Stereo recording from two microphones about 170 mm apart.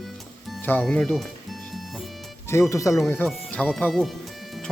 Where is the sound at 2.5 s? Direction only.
15° left (ahead or behind).